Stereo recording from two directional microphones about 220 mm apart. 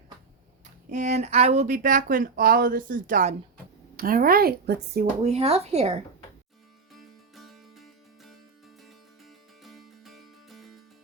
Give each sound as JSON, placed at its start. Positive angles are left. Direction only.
{"t": 0.9, "sound": "a woman's voice", "side_deg": -35}
{"t": 5.2, "sound": "speech", "side_deg": -30}
{"t": 6.9, "sound": "music", "side_deg": 0}